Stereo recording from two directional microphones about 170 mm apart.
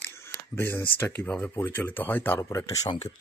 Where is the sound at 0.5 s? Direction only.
15° left (ahead or behind).